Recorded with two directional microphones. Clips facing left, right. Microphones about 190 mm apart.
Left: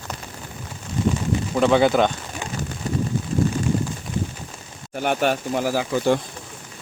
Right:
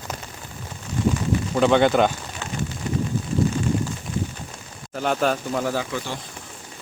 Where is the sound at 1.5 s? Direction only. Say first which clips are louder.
Even; centre (ahead or behind).